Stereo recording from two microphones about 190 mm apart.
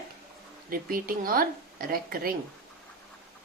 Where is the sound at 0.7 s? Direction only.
50° right (ahead or behind).